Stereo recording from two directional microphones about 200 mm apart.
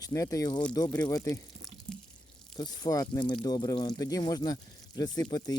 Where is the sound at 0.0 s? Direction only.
15° left (ahead or behind).